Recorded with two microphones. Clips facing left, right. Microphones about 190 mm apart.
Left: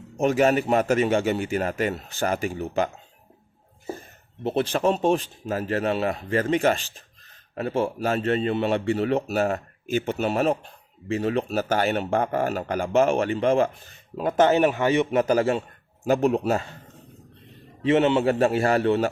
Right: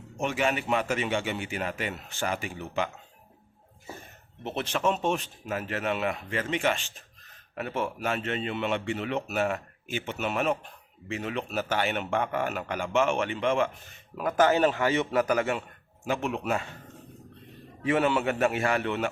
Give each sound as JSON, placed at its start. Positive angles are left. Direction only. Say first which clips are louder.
{"t": 0.2, "sound": "a man's voice", "louder": "left 8 dB", "side_deg": 40}
{"t": 4.4, "sound": "a man's voice", "louder": "left 6 dB", "side_deg": 35}
{"t": 14.2, "sound": "a man's voice", "louder": "left 4 dB", "side_deg": 25}
{"t": 17.8, "sound": "a man's voice", "louder": "left 6 dB", "side_deg": 25}